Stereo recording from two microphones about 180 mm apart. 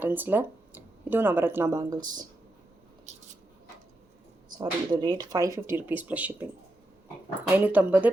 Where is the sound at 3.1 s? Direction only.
40° right (ahead or behind).